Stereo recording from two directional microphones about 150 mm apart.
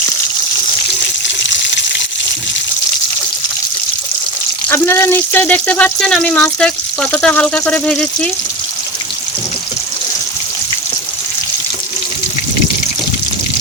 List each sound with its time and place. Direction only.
4.7 s speech: 15° left (ahead or behind)